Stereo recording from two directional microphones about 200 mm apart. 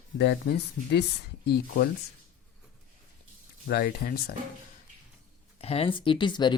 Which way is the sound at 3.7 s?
50° left (ahead or behind).